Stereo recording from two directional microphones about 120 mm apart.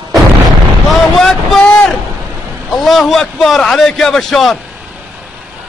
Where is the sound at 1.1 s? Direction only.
Centre (ahead or behind).